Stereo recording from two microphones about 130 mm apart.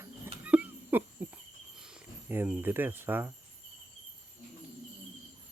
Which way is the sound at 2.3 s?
10° right (ahead or behind).